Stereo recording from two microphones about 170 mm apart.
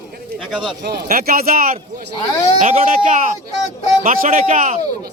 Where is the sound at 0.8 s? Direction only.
70° right (ahead or behind).